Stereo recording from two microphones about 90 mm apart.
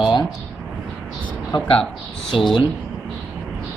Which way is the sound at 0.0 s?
65° left (ahead or behind).